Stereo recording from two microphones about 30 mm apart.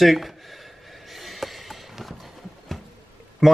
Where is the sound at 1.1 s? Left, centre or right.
Centre.